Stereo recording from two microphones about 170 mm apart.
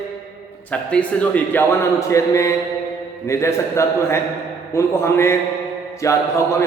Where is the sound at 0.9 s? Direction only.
10° left (ahead or behind).